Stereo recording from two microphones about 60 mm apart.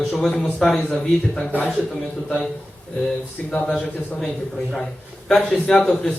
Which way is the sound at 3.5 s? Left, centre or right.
Centre.